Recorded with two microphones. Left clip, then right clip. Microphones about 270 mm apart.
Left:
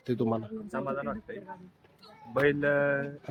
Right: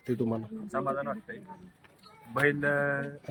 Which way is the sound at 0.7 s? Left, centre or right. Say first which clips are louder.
Right 2 dB; centre.